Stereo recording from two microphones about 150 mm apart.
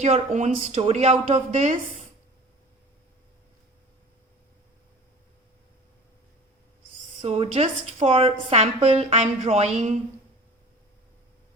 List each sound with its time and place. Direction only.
0.0 s a woman's voice: 50° right (ahead or behind)
7.2 s a woman's voice: 45° right (ahead or behind)